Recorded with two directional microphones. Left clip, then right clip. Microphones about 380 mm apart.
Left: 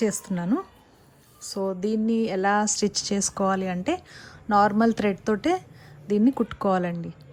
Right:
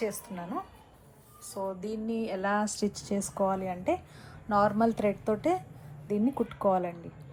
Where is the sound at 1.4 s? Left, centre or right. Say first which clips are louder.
Left 7 dB; left.